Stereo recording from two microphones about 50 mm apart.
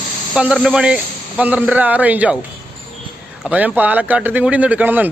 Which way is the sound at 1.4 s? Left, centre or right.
Right.